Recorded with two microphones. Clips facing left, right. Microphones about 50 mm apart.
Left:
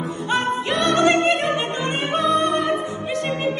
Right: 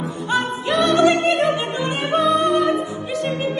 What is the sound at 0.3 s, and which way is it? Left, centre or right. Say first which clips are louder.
Opera: right 1 dB; left.